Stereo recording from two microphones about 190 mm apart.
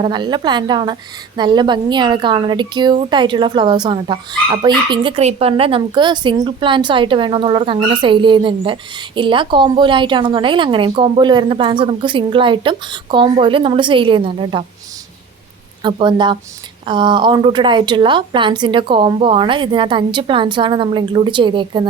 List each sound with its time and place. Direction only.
0.0 s a woman's voice: 25° right (ahead or behind)
15.8 s a woman's voice: 25° right (ahead or behind)